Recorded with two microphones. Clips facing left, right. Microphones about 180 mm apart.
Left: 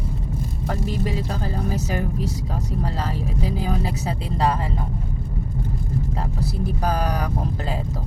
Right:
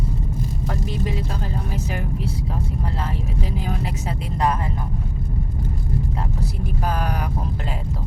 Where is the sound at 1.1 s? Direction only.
40° left (ahead or behind).